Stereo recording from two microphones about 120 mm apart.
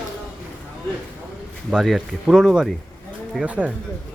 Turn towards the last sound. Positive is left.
turn(degrees=-10)  # may be behind; listen again after turning